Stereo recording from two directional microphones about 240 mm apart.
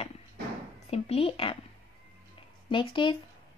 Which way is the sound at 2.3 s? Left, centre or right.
Left.